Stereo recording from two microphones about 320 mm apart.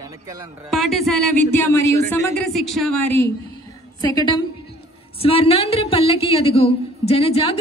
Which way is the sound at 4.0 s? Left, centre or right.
Centre.